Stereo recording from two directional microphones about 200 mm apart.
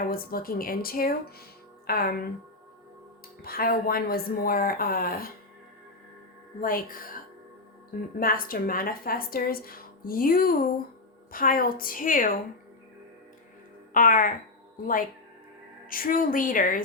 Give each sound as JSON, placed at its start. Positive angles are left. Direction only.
{"t": 0.0, "sound": "a woman's voice", "side_deg": 45}
{"t": 3.4, "sound": "a woman's voice", "side_deg": 50}
{"t": 6.6, "sound": "a woman's voice", "side_deg": 45}
{"t": 8.2, "sound": "a woman's voice", "side_deg": 45}
{"t": 13.9, "sound": "a woman's voice", "side_deg": 40}
{"t": 15.9, "sound": "a woman's voice", "side_deg": 45}